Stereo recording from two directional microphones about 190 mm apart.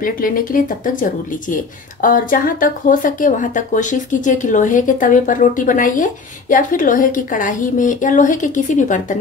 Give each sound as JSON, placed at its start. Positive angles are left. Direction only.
{"t": 0.0, "sound": "speech", "side_deg": 45}